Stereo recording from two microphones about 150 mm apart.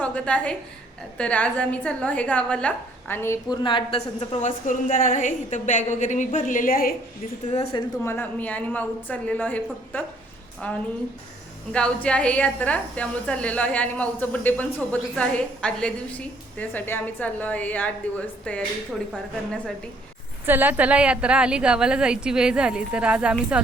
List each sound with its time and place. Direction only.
0.0 s a woman's voice: 10° left (ahead or behind)
3.5 s a woman's voice: 30° left (ahead or behind)
4.4 s a woman's voice: 60° left (ahead or behind); by 6.9 s 75° left (ahead or behind)
7.5 s a woman's voice: 40° left (ahead or behind)
8.0 s a woman's voice: 15° left (ahead or behind)
20.5 s a woman's voice: 10° right (ahead or behind)